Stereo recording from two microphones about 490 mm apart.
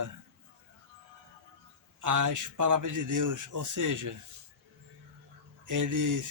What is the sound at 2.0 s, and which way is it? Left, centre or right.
A man's voice, right.